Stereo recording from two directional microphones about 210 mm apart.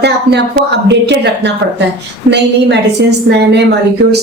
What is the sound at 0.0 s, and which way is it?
A woman's voice, 55° right (ahead or behind).